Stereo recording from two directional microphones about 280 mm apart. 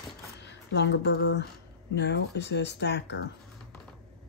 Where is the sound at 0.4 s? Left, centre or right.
Left.